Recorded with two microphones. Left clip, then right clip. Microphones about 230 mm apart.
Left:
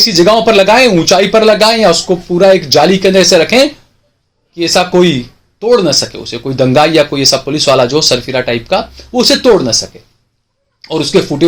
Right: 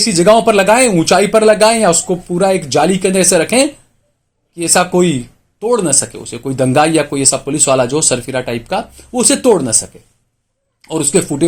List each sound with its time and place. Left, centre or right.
0.0 s speech: right